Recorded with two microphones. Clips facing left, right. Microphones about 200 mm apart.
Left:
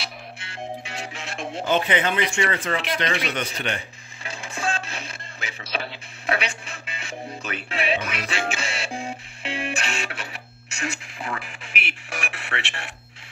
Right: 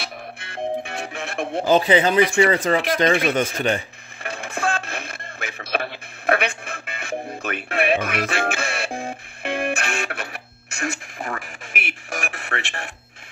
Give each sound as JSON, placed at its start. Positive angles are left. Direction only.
{"t": 0.0, "sound": "music", "side_deg": -55}
{"t": 1.6, "sound": "speech", "side_deg": -35}
{"t": 4.2, "sound": "music", "side_deg": -60}